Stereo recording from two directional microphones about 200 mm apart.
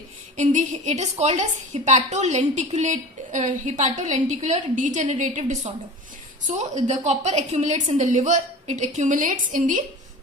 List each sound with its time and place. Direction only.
0.3 s a woman's voice: 35° right (ahead or behind)